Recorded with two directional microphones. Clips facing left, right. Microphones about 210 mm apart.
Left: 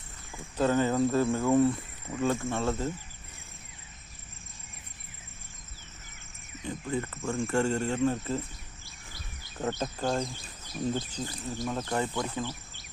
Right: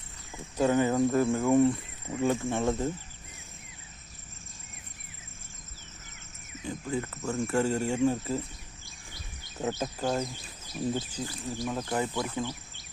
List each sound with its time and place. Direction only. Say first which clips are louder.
0.3 s speech: right 1 dB; 15° right (ahead or behind)
6.7 s speech: even; centre (ahead or behind)
9.6 s speech: even; 5° right (ahead or behind)
11.9 s speech: right 1 dB; 15° right (ahead or behind)